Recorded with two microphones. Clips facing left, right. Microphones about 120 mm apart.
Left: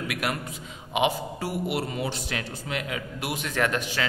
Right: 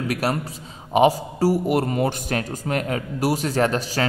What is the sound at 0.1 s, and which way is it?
A man's voice, 35° right (ahead or behind).